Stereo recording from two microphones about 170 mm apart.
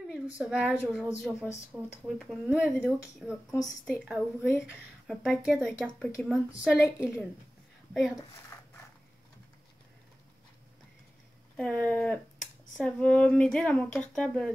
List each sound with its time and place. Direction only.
0.1 s a woman's voice: 5° right (ahead or behind)
8.5 s a sound: 15° left (ahead or behind)
11.5 s a woman's voice: 5° left (ahead or behind)